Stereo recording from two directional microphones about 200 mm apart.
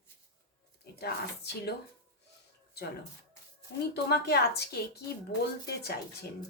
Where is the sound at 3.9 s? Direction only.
55° left (ahead or behind).